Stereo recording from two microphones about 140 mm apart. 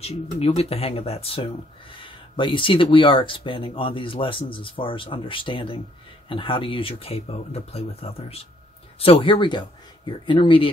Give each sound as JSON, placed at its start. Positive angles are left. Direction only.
{"t": 0.0, "sound": "speech", "side_deg": 45}